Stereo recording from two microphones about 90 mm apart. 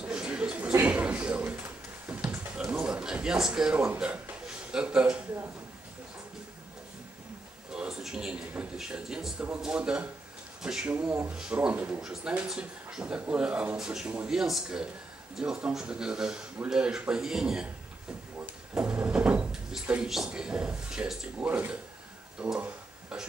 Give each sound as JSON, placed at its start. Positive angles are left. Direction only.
{"t": 0.0, "sound": "chuckle", "side_deg": -10}
{"t": 0.8, "sound": "a sound", "side_deg": -15}
{"t": 4.0, "sound": "a man's voice", "side_deg": -15}
{"t": 7.7, "sound": "speech", "side_deg": -5}
{"t": 21.4, "sound": "speech", "side_deg": -20}
{"t": 22.6, "sound": "a sound", "side_deg": -10}